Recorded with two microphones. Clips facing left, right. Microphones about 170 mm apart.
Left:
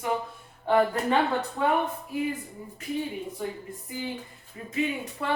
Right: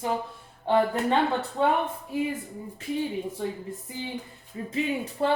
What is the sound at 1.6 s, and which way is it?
Speech, 25° right (ahead or behind).